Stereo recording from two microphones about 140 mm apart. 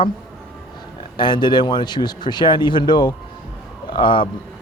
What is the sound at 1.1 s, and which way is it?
A man's voice, 35° left (ahead or behind).